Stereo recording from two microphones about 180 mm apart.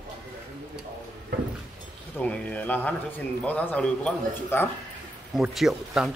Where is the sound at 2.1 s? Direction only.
5° left (ahead or behind).